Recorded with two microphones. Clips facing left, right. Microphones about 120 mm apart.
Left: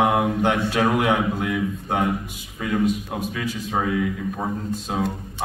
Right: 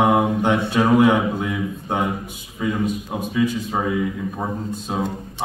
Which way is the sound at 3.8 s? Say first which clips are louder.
Even; 20° right (ahead or behind).